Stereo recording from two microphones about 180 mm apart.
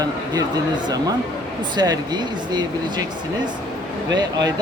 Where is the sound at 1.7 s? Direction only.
20° right (ahead or behind).